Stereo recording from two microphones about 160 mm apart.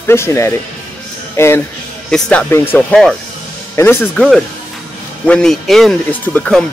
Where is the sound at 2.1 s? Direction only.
5° left (ahead or behind).